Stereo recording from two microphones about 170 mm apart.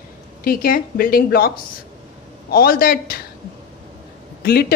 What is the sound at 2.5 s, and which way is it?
Speech, 60° left (ahead or behind).